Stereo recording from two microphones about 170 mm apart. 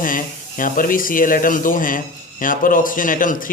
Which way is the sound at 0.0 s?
55° left (ahead or behind).